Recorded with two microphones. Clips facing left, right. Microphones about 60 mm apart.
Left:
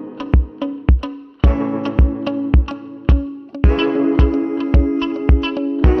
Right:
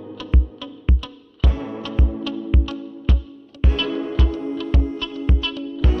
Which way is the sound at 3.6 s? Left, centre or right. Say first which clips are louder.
Left 8 dB; left.